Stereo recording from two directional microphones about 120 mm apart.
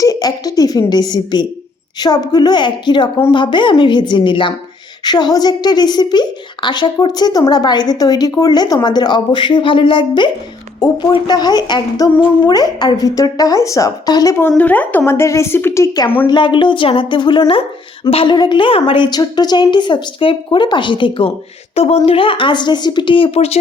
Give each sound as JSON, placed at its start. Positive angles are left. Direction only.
{"t": 0.0, "sound": "a woman's voice", "side_deg": 30}
{"t": 14.6, "sound": "speech", "side_deg": 15}
{"t": 16.3, "sound": "a woman's voice", "side_deg": 40}
{"t": 21.8, "sound": "speech", "side_deg": 55}